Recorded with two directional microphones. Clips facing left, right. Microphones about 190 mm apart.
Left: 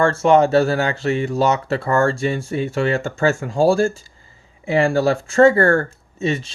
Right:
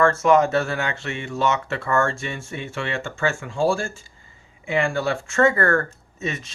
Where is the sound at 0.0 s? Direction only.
30° left (ahead or behind).